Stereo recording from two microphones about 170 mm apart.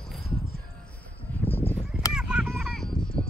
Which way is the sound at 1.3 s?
10° left (ahead or behind).